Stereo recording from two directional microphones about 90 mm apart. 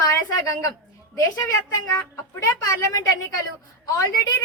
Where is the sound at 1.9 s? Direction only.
30° left (ahead or behind).